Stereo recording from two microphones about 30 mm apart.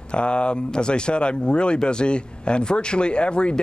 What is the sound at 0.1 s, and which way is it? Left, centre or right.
Speech, left.